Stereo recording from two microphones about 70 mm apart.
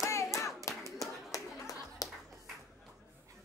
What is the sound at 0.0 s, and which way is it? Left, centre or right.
Clapping, left.